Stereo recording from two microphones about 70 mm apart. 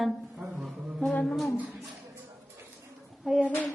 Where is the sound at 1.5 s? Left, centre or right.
Right.